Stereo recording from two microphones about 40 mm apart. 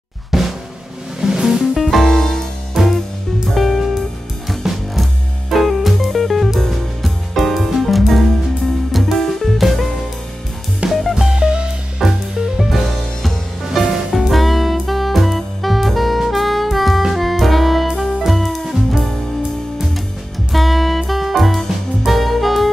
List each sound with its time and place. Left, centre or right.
0.3 s drum: centre
1.2 s music: centre
1.8 s music: centre
2.8 s music: centre
10.9 s music: centre
11.3 s music: right
12.0 s music: centre
14.2 s saxophone: centre
17.1 s music: centre
20.5 s music: centre